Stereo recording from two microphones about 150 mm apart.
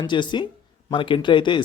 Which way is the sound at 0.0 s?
30° left (ahead or behind).